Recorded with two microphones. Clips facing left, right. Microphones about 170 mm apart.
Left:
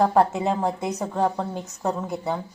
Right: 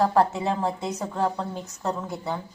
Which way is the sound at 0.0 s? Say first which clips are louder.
Left 2 dB; 15° left (ahead or behind).